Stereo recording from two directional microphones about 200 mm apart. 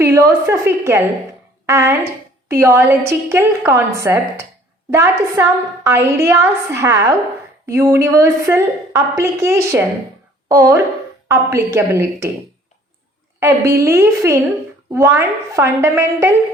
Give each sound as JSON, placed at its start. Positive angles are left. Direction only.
{"t": 0.0, "sound": "a woman's voice", "side_deg": -15}
{"t": 13.4, "sound": "a woman's voice", "side_deg": -15}